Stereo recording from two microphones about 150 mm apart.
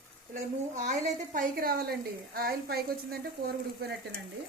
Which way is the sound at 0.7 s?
55° right (ahead or behind).